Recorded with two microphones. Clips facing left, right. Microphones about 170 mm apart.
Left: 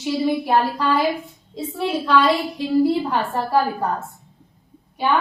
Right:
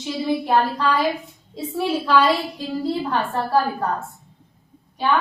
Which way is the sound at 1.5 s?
5° right (ahead or behind).